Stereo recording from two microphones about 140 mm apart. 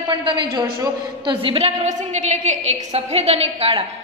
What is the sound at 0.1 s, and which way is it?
A man's voice, 35° right (ahead or behind).